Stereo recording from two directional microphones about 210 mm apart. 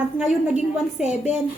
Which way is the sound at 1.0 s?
35° left (ahead or behind).